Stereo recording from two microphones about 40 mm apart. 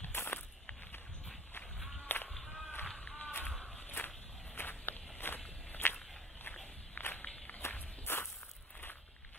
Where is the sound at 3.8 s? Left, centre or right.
Left.